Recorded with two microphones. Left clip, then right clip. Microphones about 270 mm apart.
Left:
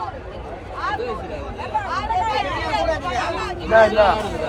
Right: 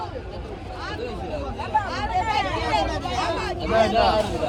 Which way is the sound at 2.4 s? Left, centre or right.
Centre.